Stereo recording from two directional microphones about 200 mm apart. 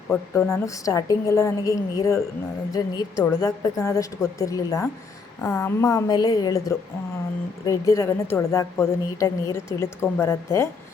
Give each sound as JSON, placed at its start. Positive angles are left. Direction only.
{"t": 0.1, "sound": "a woman's voice", "side_deg": 5}
{"t": 0.6, "sound": "a woman's voice", "side_deg": 15}